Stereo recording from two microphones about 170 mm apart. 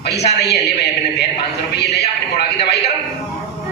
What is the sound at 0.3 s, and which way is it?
A man's voice, 75° left (ahead or behind).